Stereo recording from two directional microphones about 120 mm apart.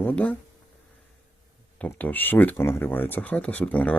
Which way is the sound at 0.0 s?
15° left (ahead or behind).